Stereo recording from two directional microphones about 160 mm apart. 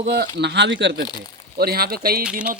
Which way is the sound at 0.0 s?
65° right (ahead or behind).